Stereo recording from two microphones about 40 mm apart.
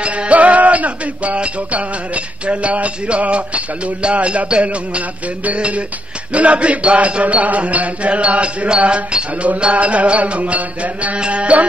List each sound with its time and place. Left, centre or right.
0.0 s music: right